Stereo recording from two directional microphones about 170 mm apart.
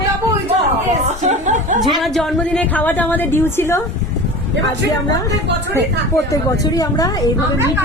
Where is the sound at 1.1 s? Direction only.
45° right (ahead or behind).